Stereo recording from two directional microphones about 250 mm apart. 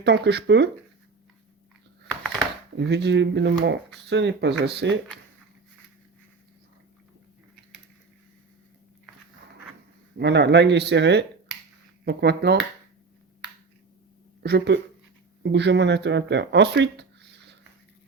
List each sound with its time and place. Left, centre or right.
0.0 s speech: right
2.7 s speech: right
10.2 s speech: right
14.4 s speech: right